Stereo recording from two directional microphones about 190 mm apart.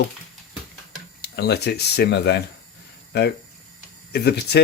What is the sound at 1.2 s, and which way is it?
Speech, 60° left (ahead or behind).